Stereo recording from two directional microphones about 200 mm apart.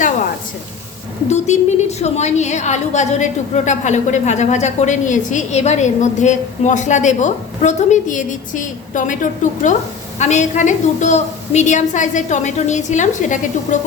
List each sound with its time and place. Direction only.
1.5 s a woman's voice: 35° left (ahead or behind)